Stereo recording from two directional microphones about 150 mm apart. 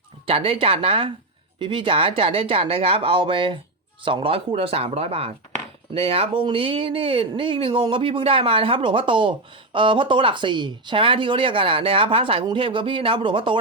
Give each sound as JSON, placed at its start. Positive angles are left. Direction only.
{"t": 0.3, "sound": "speech", "side_deg": -40}